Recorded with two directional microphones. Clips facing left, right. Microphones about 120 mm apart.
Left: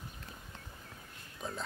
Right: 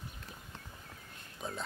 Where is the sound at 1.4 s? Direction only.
Centre (ahead or behind).